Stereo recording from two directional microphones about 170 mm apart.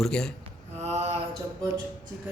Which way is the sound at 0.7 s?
40° right (ahead or behind).